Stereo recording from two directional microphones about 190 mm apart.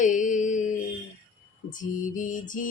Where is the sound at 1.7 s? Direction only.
45° left (ahead or behind).